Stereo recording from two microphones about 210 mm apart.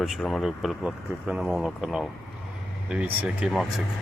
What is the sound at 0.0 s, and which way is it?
Speech, centre (ahead or behind).